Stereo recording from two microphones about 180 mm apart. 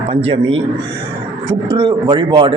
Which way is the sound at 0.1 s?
30° right (ahead or behind).